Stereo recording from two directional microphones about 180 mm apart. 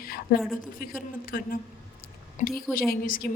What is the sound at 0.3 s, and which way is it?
A woman's voice, 55° left (ahead or behind).